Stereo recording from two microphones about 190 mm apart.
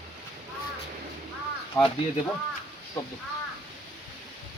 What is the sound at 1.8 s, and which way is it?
Speech, 5° left (ahead or behind).